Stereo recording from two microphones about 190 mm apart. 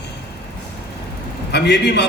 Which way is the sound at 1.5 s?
65° left (ahead or behind).